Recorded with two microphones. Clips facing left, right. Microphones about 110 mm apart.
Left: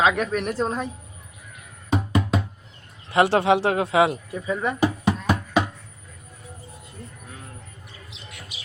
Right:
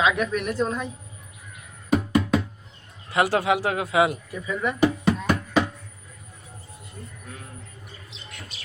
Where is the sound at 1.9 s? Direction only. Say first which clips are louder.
Right 2 dB; 25° left (ahead or behind).